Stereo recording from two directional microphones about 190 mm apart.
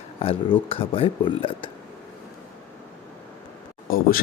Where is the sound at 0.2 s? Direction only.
30° left (ahead or behind).